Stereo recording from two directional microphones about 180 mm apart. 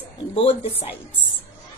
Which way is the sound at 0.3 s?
30° left (ahead or behind).